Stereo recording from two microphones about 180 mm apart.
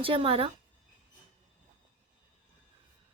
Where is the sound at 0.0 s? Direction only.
30° right (ahead or behind).